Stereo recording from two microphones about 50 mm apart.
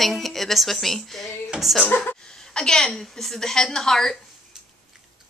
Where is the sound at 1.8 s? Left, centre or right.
Left.